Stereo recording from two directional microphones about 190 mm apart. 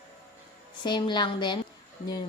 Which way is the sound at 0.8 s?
25° left (ahead or behind).